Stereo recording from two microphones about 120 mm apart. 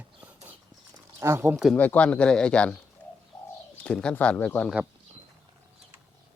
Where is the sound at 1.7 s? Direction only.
15° left (ahead or behind).